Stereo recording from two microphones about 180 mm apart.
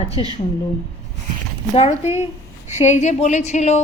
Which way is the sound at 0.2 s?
25° left (ahead or behind).